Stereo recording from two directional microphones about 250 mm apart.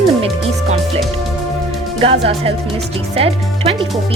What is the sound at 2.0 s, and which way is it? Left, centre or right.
Speech, right.